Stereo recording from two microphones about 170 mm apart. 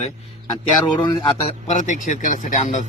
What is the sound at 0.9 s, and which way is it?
Speech, 25° left (ahead or behind).